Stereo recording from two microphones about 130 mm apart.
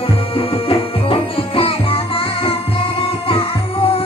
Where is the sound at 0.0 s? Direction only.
45° left (ahead or behind).